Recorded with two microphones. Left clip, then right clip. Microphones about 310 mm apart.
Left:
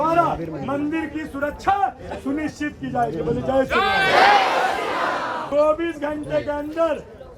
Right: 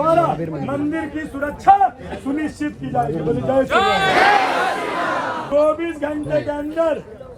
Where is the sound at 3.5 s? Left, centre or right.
Centre.